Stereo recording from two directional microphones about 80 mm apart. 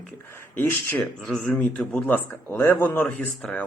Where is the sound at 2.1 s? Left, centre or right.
Left.